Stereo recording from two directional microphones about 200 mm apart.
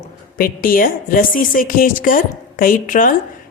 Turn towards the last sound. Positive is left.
turn(degrees=40)  # may be behind; listen again after turning